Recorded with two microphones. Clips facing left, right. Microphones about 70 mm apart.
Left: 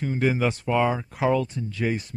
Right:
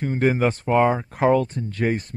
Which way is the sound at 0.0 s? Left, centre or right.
Right.